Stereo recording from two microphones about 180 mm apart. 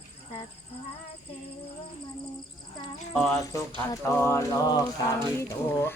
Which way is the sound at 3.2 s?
Centre (ahead or behind).